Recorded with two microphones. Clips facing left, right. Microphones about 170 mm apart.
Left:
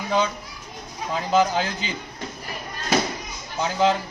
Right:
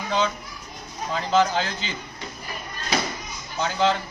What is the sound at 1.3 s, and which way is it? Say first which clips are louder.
Speech: left 1 dB; 15° left (ahead or behind).